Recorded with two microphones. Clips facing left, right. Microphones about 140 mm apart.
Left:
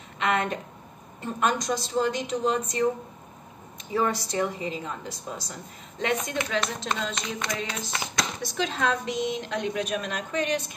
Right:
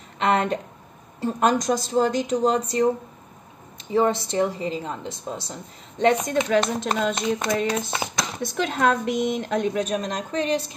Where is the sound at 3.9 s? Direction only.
25° right (ahead or behind).